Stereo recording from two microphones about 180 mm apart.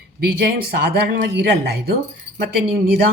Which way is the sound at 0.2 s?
60° right (ahead or behind).